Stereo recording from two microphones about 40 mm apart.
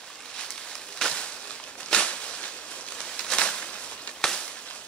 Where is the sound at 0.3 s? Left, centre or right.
Left.